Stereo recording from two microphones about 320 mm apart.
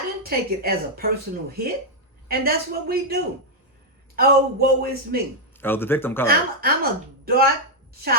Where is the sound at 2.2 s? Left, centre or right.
Right.